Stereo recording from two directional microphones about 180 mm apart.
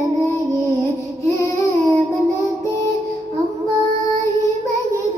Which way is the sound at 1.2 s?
15° left (ahead or behind).